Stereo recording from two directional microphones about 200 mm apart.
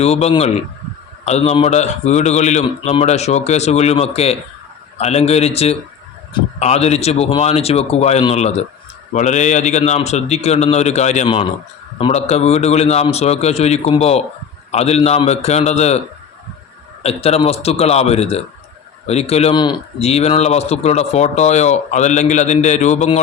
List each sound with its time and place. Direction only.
0.0 s speech: 30° left (ahead or behind)
17.0 s speech: 30° left (ahead or behind)